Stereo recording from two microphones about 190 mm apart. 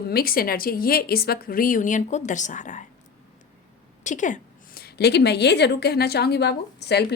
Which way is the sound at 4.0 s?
40° left (ahead or behind).